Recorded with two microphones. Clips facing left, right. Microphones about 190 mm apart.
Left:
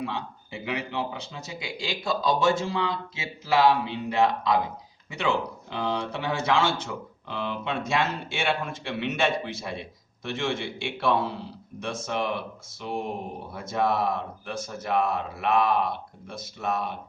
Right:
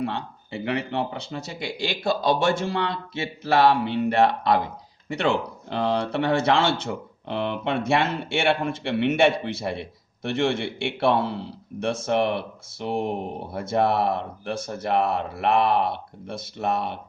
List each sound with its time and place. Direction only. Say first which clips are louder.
0.0 s a man's voice: right 4 dB; 60° right (ahead or behind)